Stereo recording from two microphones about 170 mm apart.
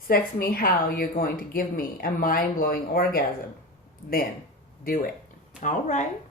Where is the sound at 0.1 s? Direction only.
60° left (ahead or behind).